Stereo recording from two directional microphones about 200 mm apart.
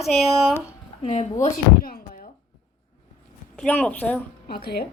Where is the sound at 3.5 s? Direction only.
5° left (ahead or behind).